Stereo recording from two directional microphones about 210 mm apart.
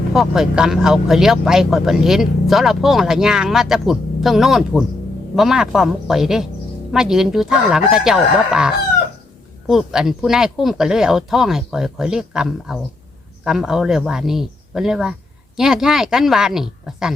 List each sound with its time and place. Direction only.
0.1 s speech: centre (ahead or behind)